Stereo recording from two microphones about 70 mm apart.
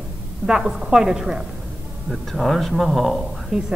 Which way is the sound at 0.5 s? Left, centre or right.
Centre.